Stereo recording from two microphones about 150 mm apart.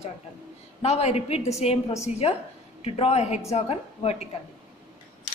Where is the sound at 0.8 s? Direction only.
45° left (ahead or behind).